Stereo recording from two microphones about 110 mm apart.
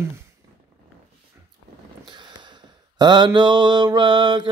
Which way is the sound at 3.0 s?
40° right (ahead or behind).